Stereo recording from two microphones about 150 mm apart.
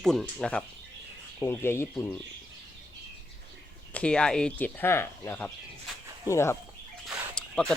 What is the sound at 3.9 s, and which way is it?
Speech, 5° left (ahead or behind).